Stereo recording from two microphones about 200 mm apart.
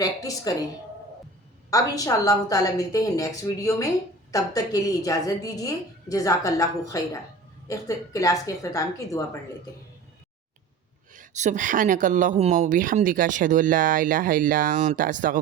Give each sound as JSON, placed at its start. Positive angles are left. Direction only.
{"t": 0.0, "sound": "a woman's voice", "side_deg": 20}
{"t": 1.7, "sound": "a woman's voice", "side_deg": 15}
{"t": 11.1, "sound": "speech", "side_deg": -40}